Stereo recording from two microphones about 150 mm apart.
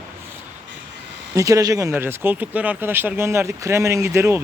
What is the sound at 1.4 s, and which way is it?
Speech, 20° right (ahead or behind).